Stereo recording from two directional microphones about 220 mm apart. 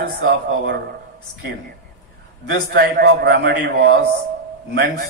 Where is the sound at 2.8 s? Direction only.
45° right (ahead or behind).